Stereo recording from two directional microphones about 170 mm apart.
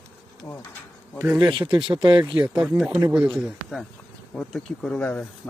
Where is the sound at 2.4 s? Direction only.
5° right (ahead or behind).